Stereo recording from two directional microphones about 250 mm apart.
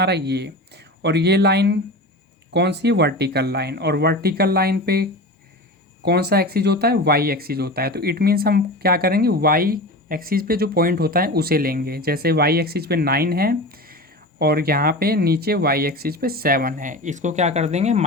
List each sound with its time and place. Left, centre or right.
0.0 s speech: right